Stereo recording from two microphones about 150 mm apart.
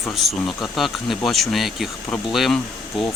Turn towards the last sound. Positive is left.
turn(degrees=0)  # may be behind; listen again after turning